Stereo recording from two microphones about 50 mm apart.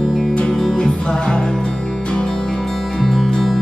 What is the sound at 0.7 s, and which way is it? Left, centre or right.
Music, centre.